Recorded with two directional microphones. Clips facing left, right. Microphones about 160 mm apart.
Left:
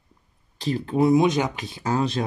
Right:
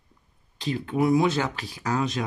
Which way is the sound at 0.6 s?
35° left (ahead or behind).